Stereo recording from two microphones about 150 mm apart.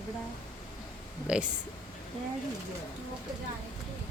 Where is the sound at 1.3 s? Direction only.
5° right (ahead or behind).